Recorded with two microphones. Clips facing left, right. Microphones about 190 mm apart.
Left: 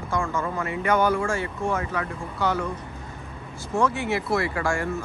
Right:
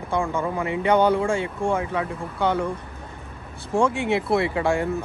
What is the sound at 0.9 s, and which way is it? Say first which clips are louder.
Speech: right 3 dB; 30° right (ahead or behind).